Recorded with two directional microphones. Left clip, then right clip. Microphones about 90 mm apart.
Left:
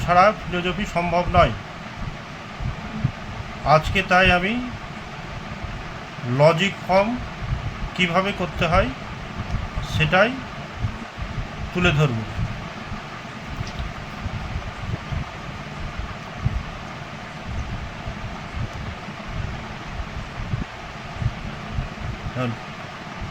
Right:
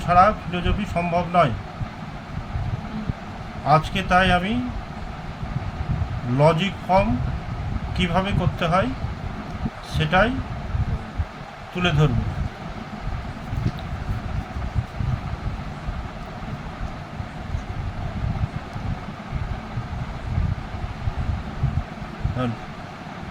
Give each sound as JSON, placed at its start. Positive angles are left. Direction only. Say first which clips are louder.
{"t": 0.1, "sound": "speech", "louder": "even", "side_deg": 20}
{"t": 3.7, "sound": "speech", "louder": "left 1 dB", "side_deg": 20}
{"t": 6.3, "sound": "speech", "louder": "left 2 dB", "side_deg": 20}
{"t": 10.0, "sound": "speech", "louder": "left 2 dB", "side_deg": 20}
{"t": 11.8, "sound": "speech", "louder": "left 2 dB", "side_deg": 25}